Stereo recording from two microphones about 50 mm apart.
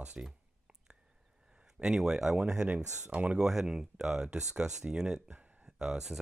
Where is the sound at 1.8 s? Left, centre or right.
Centre.